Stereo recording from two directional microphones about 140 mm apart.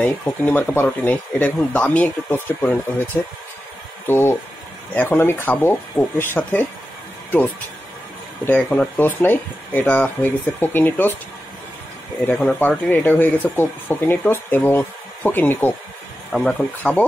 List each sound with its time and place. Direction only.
0.0 s speech: 10° left (ahead or behind)
4.1 s speech: 15° left (ahead or behind)
8.5 s speech: 10° left (ahead or behind)
12.3 s speech: 10° left (ahead or behind)